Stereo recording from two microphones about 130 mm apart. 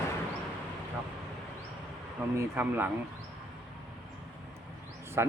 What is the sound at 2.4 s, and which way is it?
Speech, 15° right (ahead or behind).